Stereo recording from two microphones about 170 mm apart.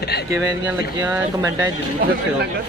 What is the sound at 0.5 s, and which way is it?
Speech, 10° right (ahead or behind).